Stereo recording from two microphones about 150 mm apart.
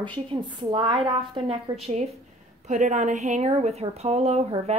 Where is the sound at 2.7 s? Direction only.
55° right (ahead or behind).